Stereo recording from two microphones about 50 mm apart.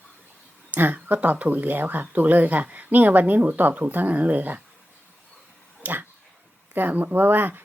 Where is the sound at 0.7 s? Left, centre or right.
Right.